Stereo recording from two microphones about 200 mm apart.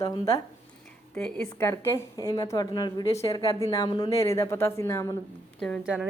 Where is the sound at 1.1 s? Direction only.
5° left (ahead or behind).